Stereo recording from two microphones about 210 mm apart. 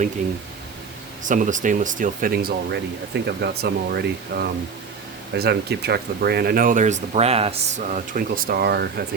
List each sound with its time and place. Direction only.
1.2 s speech: 35° right (ahead or behind)